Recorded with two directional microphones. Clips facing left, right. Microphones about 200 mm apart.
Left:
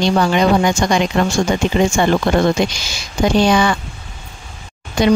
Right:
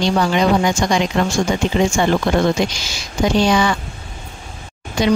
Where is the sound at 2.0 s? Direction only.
55° left (ahead or behind).